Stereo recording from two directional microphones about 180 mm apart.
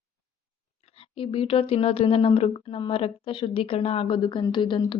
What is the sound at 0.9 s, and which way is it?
A woman's voice, 30° left (ahead or behind).